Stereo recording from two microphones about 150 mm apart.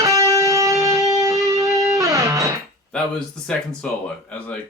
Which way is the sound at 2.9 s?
5° left (ahead or behind).